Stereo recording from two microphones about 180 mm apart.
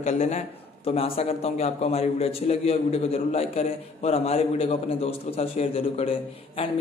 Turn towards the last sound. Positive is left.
turn(degrees=30)  # may be behind; listen again after turning